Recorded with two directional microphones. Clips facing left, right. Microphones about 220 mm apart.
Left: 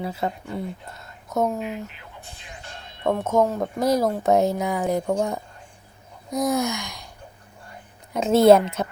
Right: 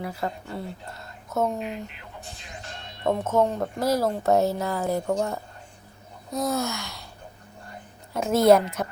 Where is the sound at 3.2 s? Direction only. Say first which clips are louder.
Left 3 dB; 10° left (ahead or behind).